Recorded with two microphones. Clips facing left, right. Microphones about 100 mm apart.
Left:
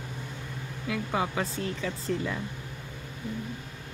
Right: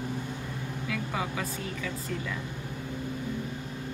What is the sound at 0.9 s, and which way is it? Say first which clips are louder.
Speech: left 4 dB; 25° left (ahead or behind).